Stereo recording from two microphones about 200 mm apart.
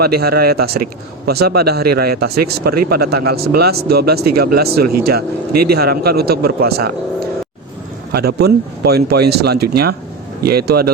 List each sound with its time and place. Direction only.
0.0 s speech: 50° right (ahead or behind)
8.1 s speech: 55° right (ahead or behind)